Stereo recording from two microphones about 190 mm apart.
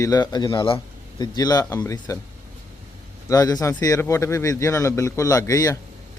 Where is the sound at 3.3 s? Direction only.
20° left (ahead or behind).